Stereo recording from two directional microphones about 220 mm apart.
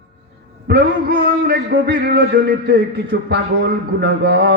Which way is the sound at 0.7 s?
45° right (ahead or behind).